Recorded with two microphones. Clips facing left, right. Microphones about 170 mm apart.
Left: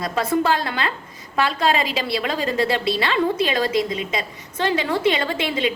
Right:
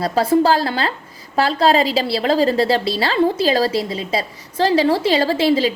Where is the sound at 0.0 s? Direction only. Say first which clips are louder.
Right 6 dB; 30° right (ahead or behind).